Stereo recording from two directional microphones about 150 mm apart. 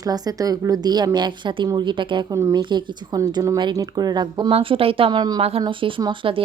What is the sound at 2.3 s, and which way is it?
Speech, 20° right (ahead or behind).